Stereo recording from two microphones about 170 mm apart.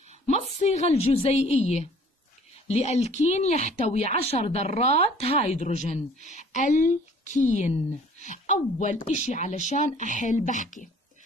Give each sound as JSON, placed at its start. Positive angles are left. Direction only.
{"t": 0.6, "sound": "a woman's voice", "side_deg": 40}